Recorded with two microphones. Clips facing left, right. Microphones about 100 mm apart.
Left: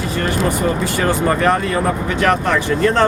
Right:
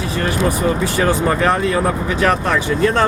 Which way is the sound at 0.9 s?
15° right (ahead or behind).